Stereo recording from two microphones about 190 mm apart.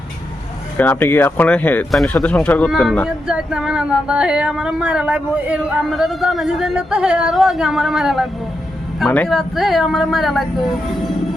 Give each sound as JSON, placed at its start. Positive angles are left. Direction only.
{"t": 0.8, "sound": "speech", "side_deg": 10}